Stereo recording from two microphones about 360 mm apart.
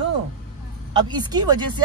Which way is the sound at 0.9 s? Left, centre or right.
Centre.